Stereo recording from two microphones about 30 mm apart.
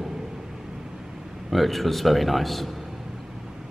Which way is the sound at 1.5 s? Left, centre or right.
Centre.